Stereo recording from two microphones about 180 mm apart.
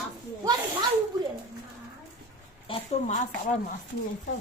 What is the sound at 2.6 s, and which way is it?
Speech, 35° left (ahead or behind).